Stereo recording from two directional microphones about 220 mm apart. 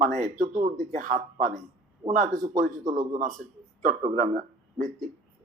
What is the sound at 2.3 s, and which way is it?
Speech, 15° right (ahead or behind).